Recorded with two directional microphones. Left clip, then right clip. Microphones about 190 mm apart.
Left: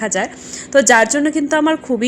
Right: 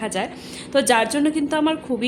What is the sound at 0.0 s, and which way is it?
A woman's voice, 20° left (ahead or behind).